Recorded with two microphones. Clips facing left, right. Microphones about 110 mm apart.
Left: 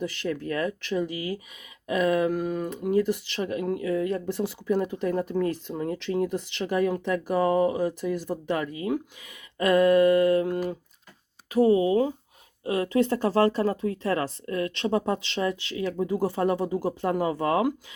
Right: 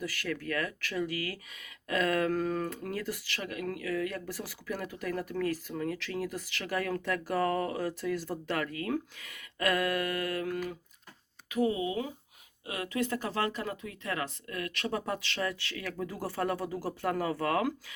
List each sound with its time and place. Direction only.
0.0 s speech: 25° left (ahead or behind)